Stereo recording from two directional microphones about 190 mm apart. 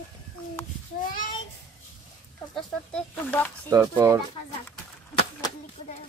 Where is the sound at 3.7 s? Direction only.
15° right (ahead or behind).